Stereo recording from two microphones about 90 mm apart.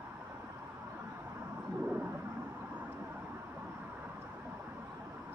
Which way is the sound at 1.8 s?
20° right (ahead or behind).